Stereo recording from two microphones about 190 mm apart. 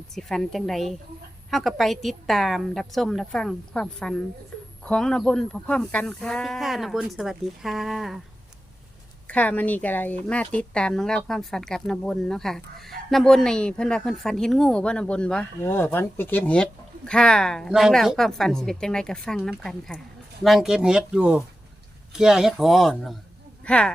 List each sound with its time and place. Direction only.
0.1 s a woman's voice: centre (ahead or behind)
9.2 s a woman's voice: 10° left (ahead or behind)